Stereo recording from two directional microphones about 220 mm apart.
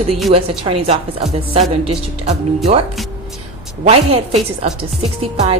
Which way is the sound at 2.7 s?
30° right (ahead or behind).